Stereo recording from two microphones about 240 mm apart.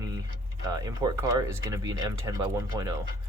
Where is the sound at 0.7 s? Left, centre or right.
Centre.